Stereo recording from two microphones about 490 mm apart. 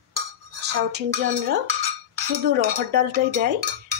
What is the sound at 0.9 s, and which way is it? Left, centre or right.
Speech, centre.